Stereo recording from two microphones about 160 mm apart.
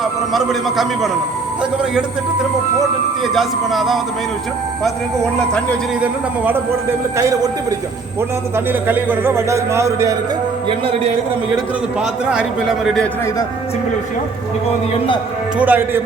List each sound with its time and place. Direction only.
0.0 s a man's voice: centre (ahead or behind)
3.3 s a man's voice: centre (ahead or behind)
6.0 s a man's voice: 10° right (ahead or behind)
8.5 s speech: 10° right (ahead or behind)
11.9 s a man's voice: 5° right (ahead or behind)
15.5 s speech: 10° right (ahead or behind)